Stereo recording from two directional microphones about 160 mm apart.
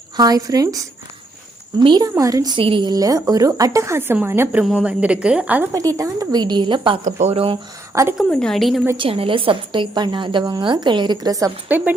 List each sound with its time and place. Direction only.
0.2 s a woman's voice: 25° right (ahead or behind)
1.8 s a woman's voice: 30° right (ahead or behind); by 5.6 s 10° right (ahead or behind)
6.0 s a woman's voice: 25° right (ahead or behind)
7.0 s speech: 45° right (ahead or behind)
8.2 s a woman's voice: 5° left (ahead or behind)
9.0 s a woman's voice: 35° right (ahead or behind)